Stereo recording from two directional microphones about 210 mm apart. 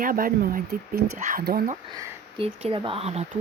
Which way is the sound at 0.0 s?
40° right (ahead or behind).